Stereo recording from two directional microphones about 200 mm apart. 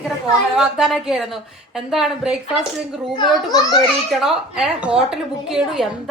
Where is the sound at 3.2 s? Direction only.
20° left (ahead or behind).